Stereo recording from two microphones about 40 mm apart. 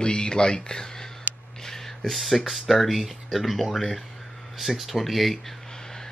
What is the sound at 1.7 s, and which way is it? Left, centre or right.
Speech, centre.